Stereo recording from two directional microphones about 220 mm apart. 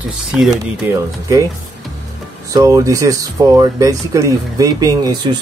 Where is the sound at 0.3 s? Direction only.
Centre (ahead or behind).